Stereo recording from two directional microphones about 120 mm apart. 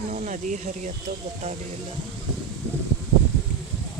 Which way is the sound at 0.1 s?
90° right.